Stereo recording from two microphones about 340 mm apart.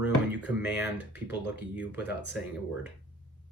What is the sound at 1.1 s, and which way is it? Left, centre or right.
Speech, left.